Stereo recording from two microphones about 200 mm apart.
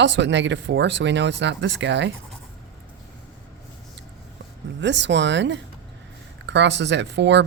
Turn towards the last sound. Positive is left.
turn(degrees=-60)  # may be behind; listen again after turning